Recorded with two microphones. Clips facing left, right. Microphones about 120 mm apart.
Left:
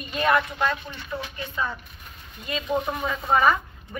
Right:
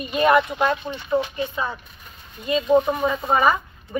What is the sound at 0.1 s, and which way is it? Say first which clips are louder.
A woman's voice: right 5 dB; 15° right (ahead or behind).